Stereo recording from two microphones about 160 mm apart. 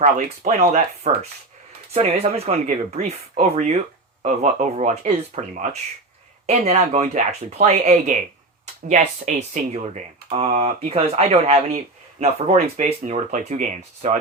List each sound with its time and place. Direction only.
0.0 s speech: 45° right (ahead or behind)
9.3 s speech: 45° right (ahead or behind)